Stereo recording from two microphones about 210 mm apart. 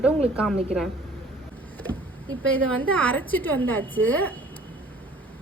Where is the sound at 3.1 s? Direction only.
10° left (ahead or behind).